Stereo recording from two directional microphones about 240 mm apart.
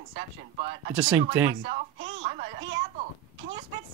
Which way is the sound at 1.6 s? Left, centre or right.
Right.